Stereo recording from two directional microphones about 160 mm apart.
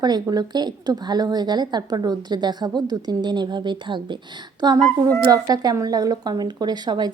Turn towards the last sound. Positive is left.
turn(degrees=-25)  # may be behind; listen again after turning